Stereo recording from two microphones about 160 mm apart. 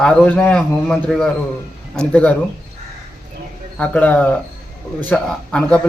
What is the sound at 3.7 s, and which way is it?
A man's voice, 10° left (ahead or behind).